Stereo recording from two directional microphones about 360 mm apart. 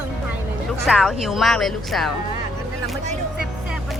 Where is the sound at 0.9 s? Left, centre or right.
Centre.